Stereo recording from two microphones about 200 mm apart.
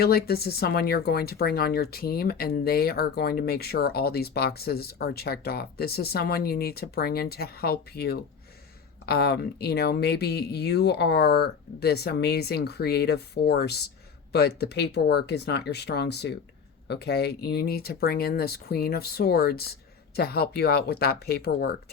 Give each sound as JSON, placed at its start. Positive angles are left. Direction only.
{"t": 0.0, "sound": "speech", "side_deg": 50}